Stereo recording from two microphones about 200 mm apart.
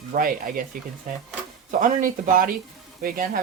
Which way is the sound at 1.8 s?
40° right (ahead or behind).